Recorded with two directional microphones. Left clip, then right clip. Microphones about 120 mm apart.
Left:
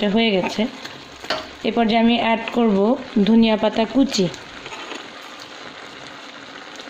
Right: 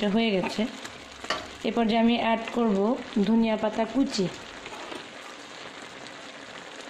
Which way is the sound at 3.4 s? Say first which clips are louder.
Left 8 dB; 30° left (ahead or behind).